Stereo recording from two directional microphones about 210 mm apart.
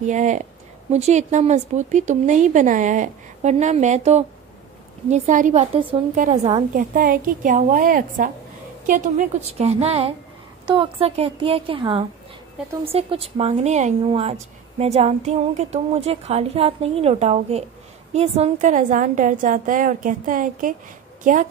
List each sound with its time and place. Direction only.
0.0 s a woman's voice: 35° right (ahead or behind)